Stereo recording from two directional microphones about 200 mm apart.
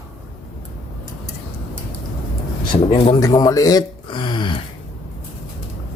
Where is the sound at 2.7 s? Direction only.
25° left (ahead or behind).